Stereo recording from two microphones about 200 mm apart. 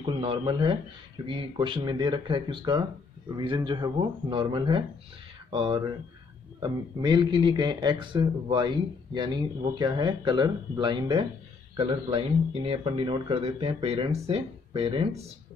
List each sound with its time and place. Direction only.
0.0 s speech: 25° right (ahead or behind)